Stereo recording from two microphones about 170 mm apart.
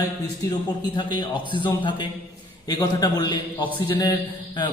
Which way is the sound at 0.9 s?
30° left (ahead or behind).